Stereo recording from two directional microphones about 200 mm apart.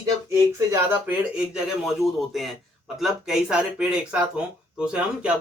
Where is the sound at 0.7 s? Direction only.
5° right (ahead or behind).